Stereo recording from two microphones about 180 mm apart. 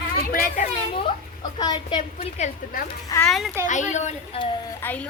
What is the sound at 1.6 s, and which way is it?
Speech, 25° left (ahead or behind).